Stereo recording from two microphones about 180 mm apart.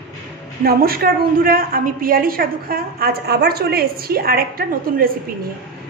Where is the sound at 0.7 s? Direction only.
55° right (ahead or behind).